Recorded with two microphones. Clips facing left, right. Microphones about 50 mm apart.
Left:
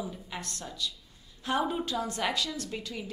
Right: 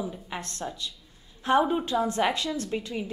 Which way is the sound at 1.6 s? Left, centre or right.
Centre.